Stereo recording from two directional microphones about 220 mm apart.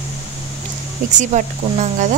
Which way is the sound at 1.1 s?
35° right (ahead or behind).